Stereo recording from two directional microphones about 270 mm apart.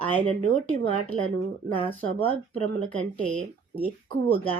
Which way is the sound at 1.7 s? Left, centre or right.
Left.